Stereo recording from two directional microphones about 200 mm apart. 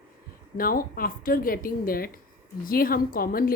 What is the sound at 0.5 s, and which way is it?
A woman's voice, 45° left (ahead or behind).